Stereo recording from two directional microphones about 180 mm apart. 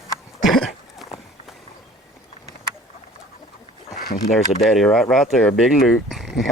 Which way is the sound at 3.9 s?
55° left (ahead or behind).